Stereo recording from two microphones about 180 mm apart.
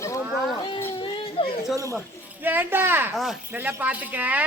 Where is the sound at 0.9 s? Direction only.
30° left (ahead or behind).